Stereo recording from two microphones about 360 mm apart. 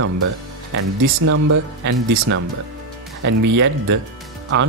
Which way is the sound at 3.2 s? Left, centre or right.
Right.